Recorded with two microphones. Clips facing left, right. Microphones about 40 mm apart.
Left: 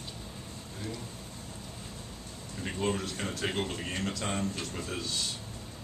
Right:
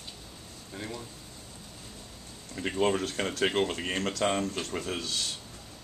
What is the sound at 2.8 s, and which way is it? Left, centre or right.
Speech, right.